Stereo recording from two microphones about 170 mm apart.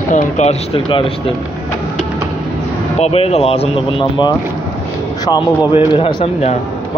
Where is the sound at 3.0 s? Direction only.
35° left (ahead or behind).